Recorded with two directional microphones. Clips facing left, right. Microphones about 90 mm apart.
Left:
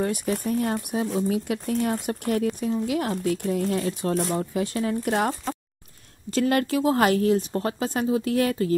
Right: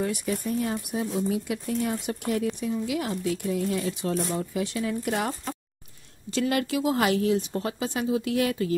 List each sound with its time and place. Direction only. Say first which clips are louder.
0.0 s speech: left 3 dB; 50° left (ahead or behind)
6.3 s speech: left 3 dB; 40° left (ahead or behind)